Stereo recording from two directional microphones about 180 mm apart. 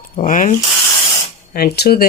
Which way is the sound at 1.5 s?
60° left (ahead or behind).